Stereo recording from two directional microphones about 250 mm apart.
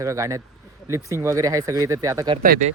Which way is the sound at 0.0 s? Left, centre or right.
Centre.